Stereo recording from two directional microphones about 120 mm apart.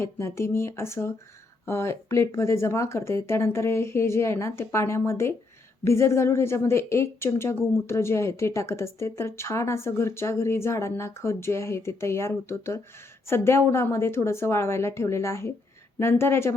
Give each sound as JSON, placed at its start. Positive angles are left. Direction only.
{"t": 0.0, "sound": "a woman's voice", "side_deg": 20}